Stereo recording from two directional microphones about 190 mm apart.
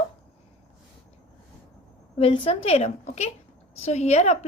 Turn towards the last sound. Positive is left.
turn(degrees=35)  # may be behind; listen again after turning